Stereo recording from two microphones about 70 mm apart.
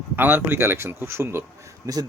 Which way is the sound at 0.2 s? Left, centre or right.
Right.